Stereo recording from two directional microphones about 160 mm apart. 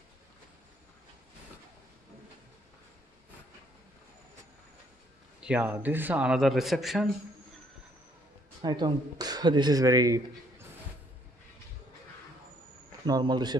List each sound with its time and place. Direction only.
5.4 s speech: 10° right (ahead or behind)
8.6 s speech: 25° right (ahead or behind)
13.0 s speech: 25° right (ahead or behind)